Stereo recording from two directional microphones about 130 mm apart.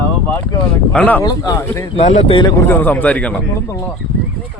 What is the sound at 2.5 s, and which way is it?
Speech, 15° left (ahead or behind).